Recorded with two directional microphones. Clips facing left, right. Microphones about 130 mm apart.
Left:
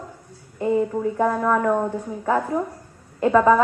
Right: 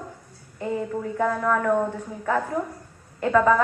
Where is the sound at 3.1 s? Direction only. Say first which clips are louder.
Left 3 dB; 20° left (ahead or behind).